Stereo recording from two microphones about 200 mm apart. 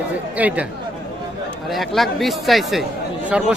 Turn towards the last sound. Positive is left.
turn(degrees=-5)  # may be behind; listen again after turning